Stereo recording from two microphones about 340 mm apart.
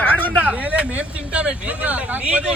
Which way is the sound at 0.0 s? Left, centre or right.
Centre.